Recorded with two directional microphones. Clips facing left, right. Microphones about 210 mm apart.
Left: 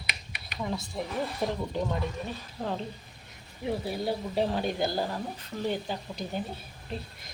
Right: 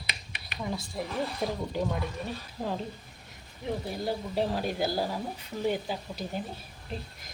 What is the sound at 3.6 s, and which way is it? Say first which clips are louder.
Speech: left 2 dB; 5° left (ahead or behind).